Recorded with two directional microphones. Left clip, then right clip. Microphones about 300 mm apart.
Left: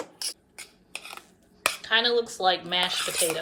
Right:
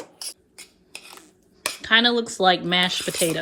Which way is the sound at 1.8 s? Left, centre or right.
Centre.